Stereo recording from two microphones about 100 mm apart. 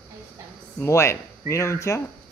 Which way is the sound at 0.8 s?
30° left (ahead or behind).